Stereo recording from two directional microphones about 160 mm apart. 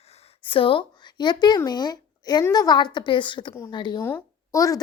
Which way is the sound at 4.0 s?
15° left (ahead or behind).